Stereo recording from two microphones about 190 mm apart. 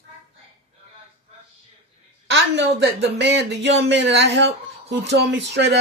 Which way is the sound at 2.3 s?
65° right (ahead or behind).